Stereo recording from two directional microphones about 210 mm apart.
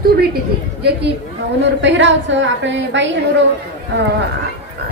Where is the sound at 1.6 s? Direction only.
60° right (ahead or behind).